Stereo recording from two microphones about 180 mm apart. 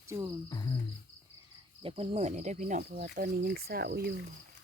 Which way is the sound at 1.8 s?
30° right (ahead or behind).